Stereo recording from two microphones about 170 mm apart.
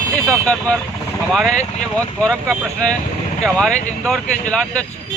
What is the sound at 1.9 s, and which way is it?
Speech, 5° left (ahead or behind).